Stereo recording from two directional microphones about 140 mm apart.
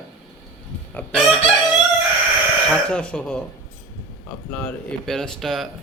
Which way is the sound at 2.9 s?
10° left (ahead or behind).